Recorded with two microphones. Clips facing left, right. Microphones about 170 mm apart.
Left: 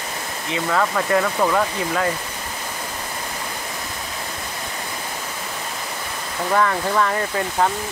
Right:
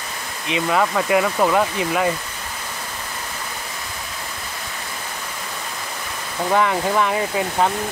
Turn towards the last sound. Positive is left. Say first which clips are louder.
# right 1 dB
turn(degrees=-10)  # may be behind; listen again after turning